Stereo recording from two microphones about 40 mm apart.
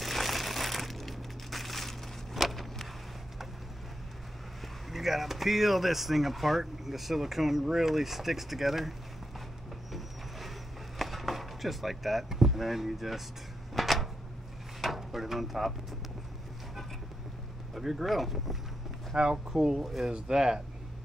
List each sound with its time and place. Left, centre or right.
0.0 s crushing: centre
4.8 s speech: centre
11.0 s speech: centre
13.7 s a sound: centre
17.7 s speech: centre
19.1 s speech: centre
19.8 s speech: centre
20.1 s speech: centre